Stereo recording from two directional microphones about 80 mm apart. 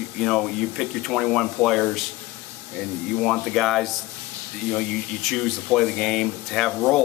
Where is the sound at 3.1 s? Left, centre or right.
Centre.